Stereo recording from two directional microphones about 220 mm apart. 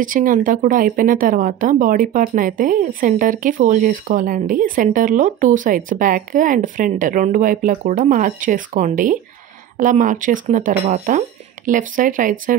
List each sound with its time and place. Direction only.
0.0 s speech: 40° right (ahead or behind)